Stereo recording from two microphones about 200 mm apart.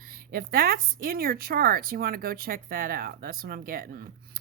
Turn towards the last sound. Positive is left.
turn(degrees=-45)  # may be behind; listen again after turning